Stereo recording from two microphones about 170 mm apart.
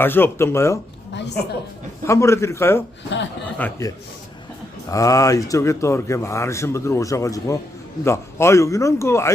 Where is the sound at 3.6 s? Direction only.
15° left (ahead or behind).